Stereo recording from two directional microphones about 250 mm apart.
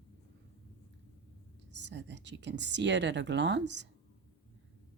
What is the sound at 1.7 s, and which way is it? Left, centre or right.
A woman's voice, right.